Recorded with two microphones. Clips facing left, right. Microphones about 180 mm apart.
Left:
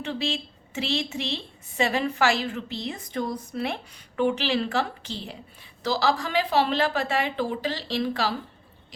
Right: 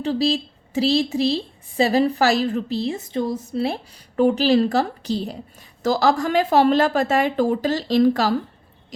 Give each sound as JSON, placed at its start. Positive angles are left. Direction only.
{"t": 0.0, "sound": "a woman's voice", "side_deg": -35}